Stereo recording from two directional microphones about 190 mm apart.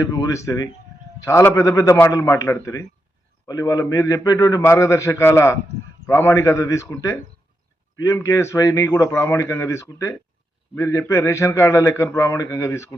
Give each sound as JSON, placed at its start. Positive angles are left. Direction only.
{"t": 0.0, "sound": "a man's voice", "side_deg": 15}